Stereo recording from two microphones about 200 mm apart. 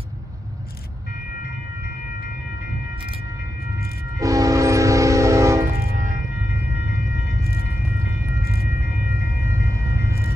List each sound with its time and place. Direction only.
4.2 s train: 15° right (ahead or behind)
5.9 s a sound: 40° right (ahead or behind)
8.6 s vehicle: 15° right (ahead or behind)